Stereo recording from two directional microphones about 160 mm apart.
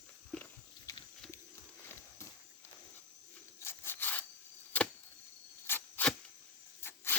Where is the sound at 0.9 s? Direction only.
20° left (ahead or behind).